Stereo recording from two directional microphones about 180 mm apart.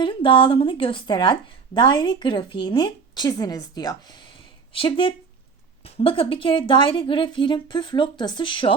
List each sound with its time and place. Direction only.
0.0 s a woman's voice: 25° left (ahead or behind)